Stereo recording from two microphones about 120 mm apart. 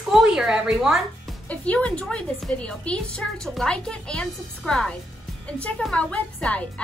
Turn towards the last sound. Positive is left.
turn(degrees=10)  # may be behind; listen again after turning